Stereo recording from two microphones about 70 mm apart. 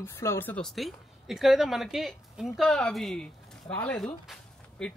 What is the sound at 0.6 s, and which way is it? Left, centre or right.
Speech, centre.